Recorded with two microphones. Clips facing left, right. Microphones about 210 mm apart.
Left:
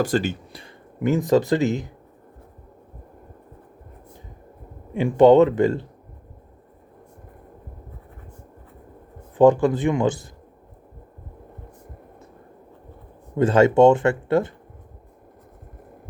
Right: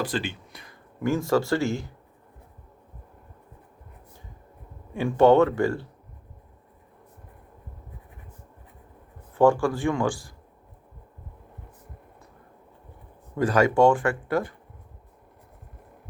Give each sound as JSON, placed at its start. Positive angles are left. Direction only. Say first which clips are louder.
{"t": 0.0, "sound": "speech", "louder": "left 7 dB", "side_deg": 45}
{"t": 0.9, "sound": "speech", "louder": "left 4 dB", "side_deg": 20}
{"t": 4.9, "sound": "speech", "louder": "left 4 dB", "side_deg": 15}
{"t": 9.3, "sound": "speech", "louder": "left 5 dB", "side_deg": 20}
{"t": 13.3, "sound": "speech", "louder": "left 5 dB", "side_deg": 25}